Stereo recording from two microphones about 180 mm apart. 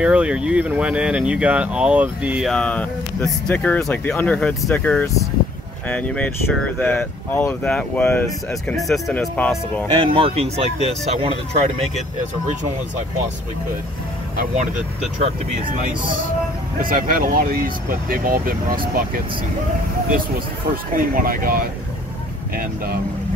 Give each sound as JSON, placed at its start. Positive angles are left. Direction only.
{"t": 0.0, "sound": "speech", "side_deg": -5}
{"t": 9.9, "sound": "speech", "side_deg": -30}
{"t": 16.8, "sound": "speech", "side_deg": -50}